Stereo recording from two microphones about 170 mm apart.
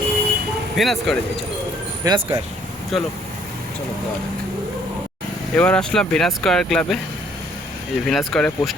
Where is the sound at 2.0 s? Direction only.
25° right (ahead or behind).